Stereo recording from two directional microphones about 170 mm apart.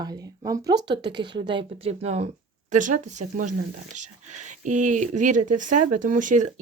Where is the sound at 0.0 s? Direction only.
20° right (ahead or behind).